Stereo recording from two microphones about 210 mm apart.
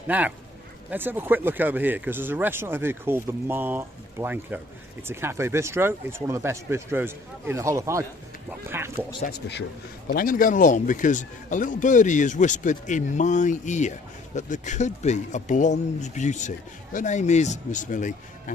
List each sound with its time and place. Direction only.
0.1 s speech: 5° right (ahead or behind)
10.1 s speech: 40° left (ahead or behind)